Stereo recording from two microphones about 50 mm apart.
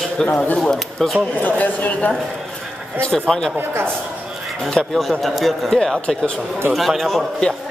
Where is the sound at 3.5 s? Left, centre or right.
Right.